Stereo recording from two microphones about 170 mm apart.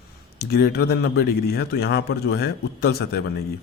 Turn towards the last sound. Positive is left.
turn(degrees=70)  # may be behind; listen again after turning